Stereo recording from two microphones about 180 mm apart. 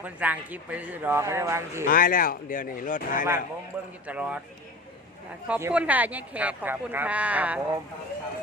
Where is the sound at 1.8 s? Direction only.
50° left (ahead or behind).